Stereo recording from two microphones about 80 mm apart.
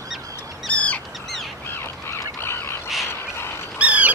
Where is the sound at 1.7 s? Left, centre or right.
Left.